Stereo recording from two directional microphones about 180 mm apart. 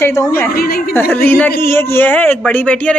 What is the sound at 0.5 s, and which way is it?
Speech, 55° left (ahead or behind).